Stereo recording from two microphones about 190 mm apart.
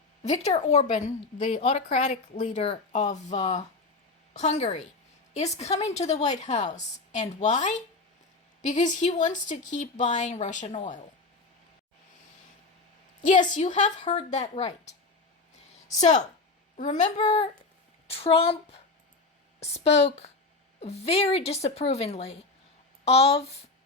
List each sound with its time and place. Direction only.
0.2 s a woman's voice: 35° left (ahead or behind)
13.2 s a woman's voice: 40° left (ahead or behind)
16.0 s a woman's voice: 40° left (ahead or behind)